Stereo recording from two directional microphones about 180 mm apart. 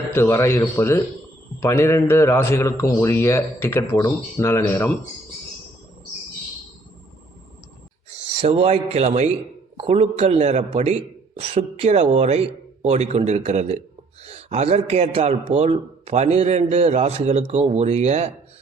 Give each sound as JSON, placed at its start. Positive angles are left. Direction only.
{"t": 0.1, "sound": "a man's voice", "side_deg": 15}
{"t": 8.4, "sound": "a man's voice", "side_deg": -35}